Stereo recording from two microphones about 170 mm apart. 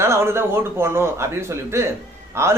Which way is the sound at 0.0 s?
15° right (ahead or behind).